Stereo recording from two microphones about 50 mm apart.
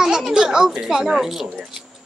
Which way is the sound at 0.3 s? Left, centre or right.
Centre.